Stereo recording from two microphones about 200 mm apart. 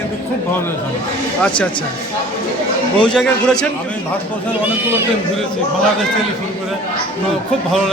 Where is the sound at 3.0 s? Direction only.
5° left (ahead or behind).